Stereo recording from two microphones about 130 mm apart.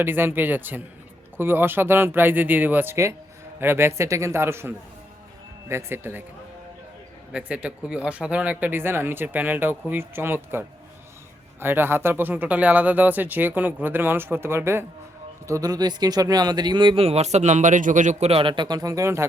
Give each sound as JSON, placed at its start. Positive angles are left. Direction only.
{"t": 0.0, "sound": "a man's voice", "side_deg": -15}
{"t": 7.3, "sound": "speech", "side_deg": -10}